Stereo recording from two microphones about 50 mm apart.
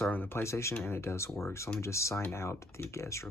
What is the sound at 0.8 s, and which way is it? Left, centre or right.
Speech, left.